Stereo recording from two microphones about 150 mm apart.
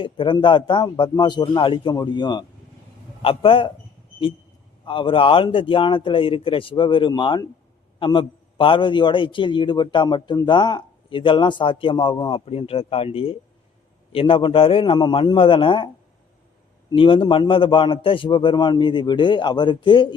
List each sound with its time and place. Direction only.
0.0 s a man's voice: 35° left (ahead or behind)
4.9 s a man's voice: 35° left (ahead or behind)
16.9 s a man's voice: 35° left (ahead or behind)